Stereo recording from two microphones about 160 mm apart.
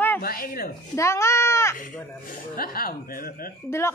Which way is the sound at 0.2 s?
65° left (ahead or behind).